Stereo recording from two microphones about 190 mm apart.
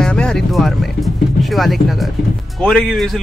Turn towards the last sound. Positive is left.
turn(degrees=5)  # may be behind; listen again after turning